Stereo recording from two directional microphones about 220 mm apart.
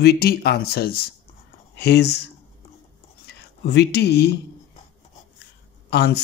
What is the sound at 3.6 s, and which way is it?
Speech, 50° left (ahead or behind).